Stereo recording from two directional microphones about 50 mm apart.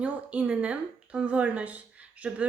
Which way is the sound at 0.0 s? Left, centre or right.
Right.